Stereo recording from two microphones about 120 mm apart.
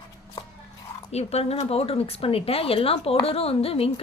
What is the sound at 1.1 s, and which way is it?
Speech, 60° left (ahead or behind).